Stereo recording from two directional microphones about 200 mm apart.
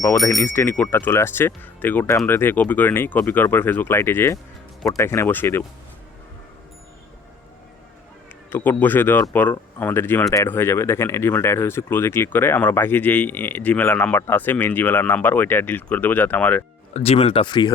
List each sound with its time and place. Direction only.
0.3 s speech: 10° left (ahead or behind)
8.4 s speech: 10° left (ahead or behind)
16.9 s speech: 30° left (ahead or behind)